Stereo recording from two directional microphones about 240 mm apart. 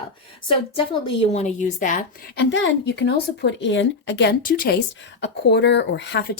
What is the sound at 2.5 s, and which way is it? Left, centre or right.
A woman's voice, left.